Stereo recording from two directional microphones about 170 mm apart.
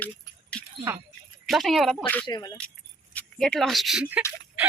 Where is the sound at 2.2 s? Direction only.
25° left (ahead or behind).